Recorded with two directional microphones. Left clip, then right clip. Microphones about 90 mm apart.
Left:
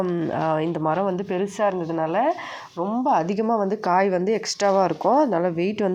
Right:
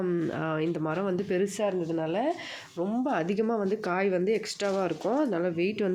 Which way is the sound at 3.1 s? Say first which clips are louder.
Left 7 dB; 30° left (ahead or behind).